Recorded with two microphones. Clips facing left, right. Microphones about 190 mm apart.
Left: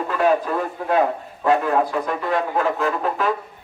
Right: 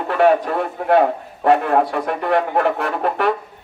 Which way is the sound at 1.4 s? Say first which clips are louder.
Right 3 dB; 70° right (ahead or behind).